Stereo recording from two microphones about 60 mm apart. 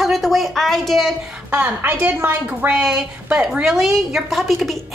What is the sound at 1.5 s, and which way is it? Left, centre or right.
Speech, right.